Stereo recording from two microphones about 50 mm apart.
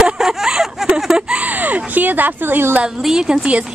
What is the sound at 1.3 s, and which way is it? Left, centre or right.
Speech, right.